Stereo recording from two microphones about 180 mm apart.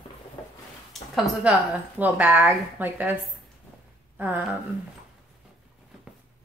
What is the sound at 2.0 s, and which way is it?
Speech, 10° right (ahead or behind).